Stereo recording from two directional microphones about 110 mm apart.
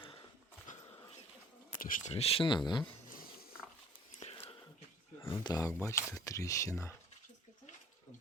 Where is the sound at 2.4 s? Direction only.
45° left (ahead or behind).